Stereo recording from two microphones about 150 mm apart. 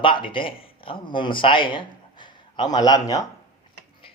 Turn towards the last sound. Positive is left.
turn(degrees=25)  # may be behind; listen again after turning